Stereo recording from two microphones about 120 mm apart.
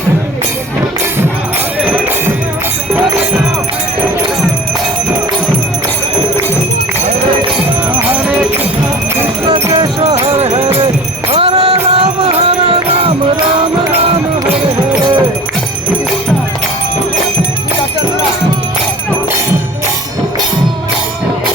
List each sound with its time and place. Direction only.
8.0 s music: 15° right (ahead or behind)
9.6 s music: 30° right (ahead or behind)
10.0 s music: 60° right (ahead or behind)